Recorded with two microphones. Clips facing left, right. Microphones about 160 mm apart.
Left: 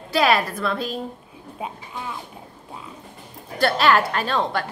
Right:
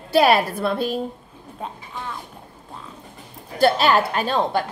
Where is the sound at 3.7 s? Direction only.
25° right (ahead or behind).